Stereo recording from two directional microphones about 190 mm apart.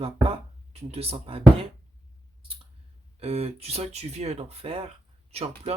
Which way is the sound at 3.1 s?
30° right (ahead or behind).